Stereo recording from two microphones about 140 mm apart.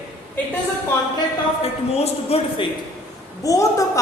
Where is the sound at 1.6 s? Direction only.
45° left (ahead or behind).